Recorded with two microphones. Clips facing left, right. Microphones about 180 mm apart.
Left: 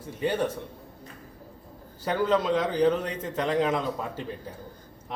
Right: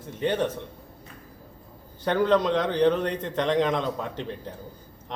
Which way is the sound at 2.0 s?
5° left (ahead or behind).